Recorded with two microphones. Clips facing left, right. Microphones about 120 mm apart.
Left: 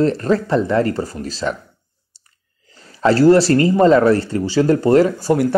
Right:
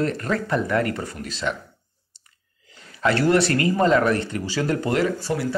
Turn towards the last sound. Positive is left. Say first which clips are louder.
# left 8 dB
turn(degrees=45)  # may be behind; listen again after turning